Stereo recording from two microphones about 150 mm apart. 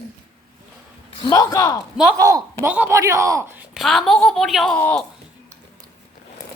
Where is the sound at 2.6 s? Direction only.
10° right (ahead or behind).